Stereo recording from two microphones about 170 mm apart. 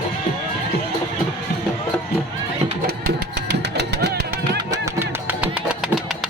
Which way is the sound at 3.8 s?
80° right.